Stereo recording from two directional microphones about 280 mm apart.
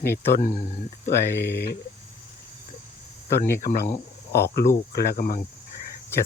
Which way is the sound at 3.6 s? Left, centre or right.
Left.